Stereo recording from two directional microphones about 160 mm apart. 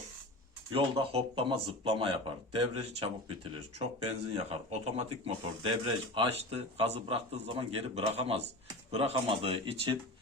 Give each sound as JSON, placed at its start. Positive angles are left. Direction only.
{"t": 0.7, "sound": "speech", "side_deg": -35}
{"t": 4.4, "sound": "speech", "side_deg": -40}